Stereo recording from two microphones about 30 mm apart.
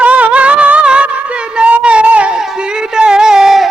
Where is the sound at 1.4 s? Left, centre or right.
Right.